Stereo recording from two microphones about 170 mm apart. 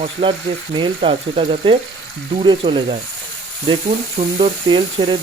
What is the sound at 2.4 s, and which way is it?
Sizzle, 30° right (ahead or behind).